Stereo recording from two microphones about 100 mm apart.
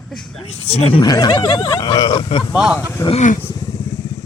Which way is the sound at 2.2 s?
55° left (ahead or behind).